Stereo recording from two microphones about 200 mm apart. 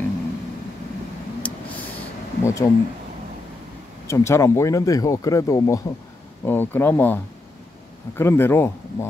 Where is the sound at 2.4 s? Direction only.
15° left (ahead or behind).